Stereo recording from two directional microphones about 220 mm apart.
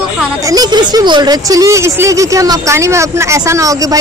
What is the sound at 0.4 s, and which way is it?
Speech, 15° right (ahead or behind).